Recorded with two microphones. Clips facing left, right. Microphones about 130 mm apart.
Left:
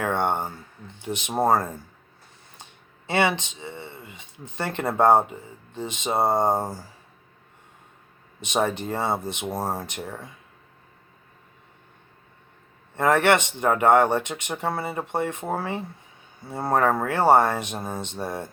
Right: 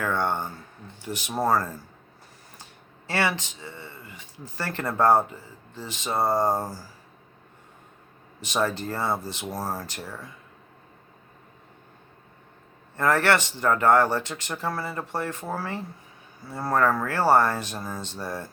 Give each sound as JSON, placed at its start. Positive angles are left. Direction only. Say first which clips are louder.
{"t": 0.0, "sound": "a sound", "louder": "left 2 dB", "side_deg": 25}
{"t": 0.9, "sound": "speech", "louder": "left 4 dB", "side_deg": 20}
{"t": 3.1, "sound": "speech", "louder": "left 4 dB", "side_deg": 20}
{"t": 8.4, "sound": "speech", "louder": "left 2 dB", "side_deg": 20}
{"t": 13.0, "sound": "speech", "louder": "left 3 dB", "side_deg": 20}